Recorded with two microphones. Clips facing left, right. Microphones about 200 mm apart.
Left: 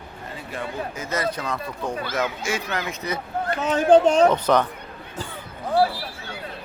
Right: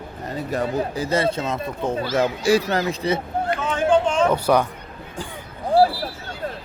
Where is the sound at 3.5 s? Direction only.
40° left (ahead or behind).